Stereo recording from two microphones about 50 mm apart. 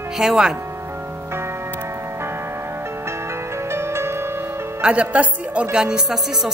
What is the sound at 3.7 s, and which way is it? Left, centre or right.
Music, right.